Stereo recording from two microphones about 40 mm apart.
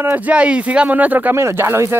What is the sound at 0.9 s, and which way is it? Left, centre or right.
Speech, right.